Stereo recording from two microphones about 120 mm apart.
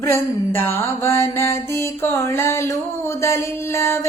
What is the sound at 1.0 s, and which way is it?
Mantra, 25° left (ahead or behind).